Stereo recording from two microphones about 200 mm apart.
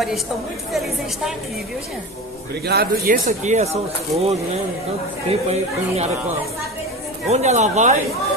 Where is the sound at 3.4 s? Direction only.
35° right (ahead or behind).